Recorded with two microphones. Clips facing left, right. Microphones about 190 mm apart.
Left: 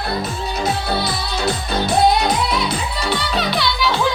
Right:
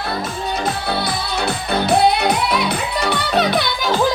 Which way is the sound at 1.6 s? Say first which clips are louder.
Right 1 dB; 60° right (ahead or behind).